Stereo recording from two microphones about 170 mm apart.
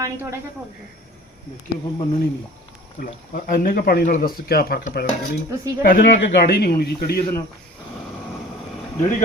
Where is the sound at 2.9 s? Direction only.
55° left (ahead or behind).